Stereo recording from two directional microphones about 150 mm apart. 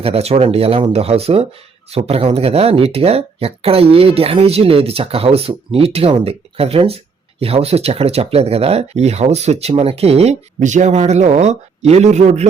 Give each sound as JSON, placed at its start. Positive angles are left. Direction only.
{"t": 0.0, "sound": "speech", "side_deg": -40}